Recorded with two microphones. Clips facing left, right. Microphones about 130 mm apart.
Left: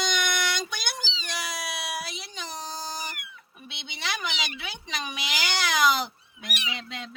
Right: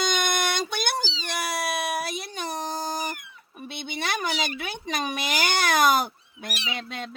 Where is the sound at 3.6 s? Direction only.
50° right (ahead or behind).